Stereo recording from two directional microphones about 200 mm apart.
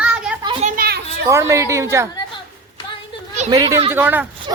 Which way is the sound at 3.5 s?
20° right (ahead or behind).